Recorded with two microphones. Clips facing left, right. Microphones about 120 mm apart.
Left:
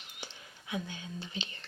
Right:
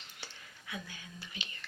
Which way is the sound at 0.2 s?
20° left (ahead or behind).